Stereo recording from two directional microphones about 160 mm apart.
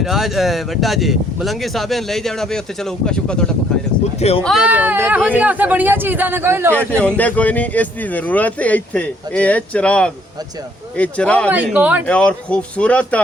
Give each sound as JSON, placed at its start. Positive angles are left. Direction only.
{"t": 0.0, "sound": "speech", "side_deg": 0}
{"t": 4.2, "sound": "speech", "side_deg": 40}
{"t": 4.4, "sound": "a man's voice", "side_deg": -5}
{"t": 6.7, "sound": "speech", "side_deg": 10}
{"t": 11.5, "sound": "a man's voice", "side_deg": -10}
{"t": 12.0, "sound": "speech", "side_deg": 5}